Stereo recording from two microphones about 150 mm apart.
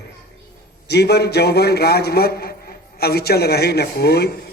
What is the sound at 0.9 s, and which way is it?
A man's voice, 90° left.